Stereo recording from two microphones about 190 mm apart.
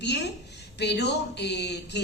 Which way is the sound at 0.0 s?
65° left (ahead or behind).